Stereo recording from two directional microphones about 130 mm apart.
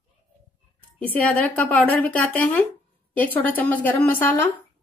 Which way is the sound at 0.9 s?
10° left (ahead or behind).